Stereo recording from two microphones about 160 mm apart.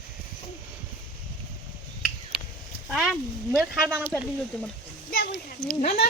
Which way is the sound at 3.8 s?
15° right (ahead or behind).